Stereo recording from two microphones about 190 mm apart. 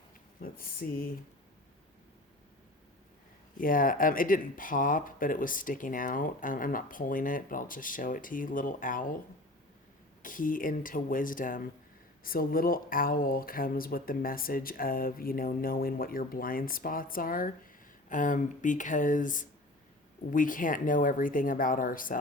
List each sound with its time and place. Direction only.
0.4 s speech: 50° left (ahead or behind)
3.6 s speech: 45° left (ahead or behind)
10.2 s speech: 45° left (ahead or behind)